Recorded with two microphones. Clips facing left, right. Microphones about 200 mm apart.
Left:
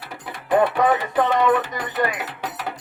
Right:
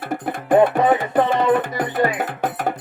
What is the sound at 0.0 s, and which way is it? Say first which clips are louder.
Music: right 10 dB; 50° right (ahead or behind).